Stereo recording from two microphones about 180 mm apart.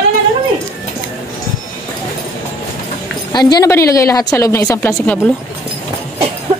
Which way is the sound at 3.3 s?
20° left (ahead or behind).